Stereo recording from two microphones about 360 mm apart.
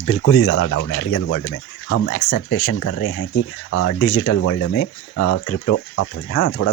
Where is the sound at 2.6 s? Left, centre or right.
Left.